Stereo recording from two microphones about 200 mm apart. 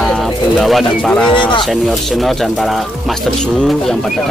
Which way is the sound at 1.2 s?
25° left (ahead or behind).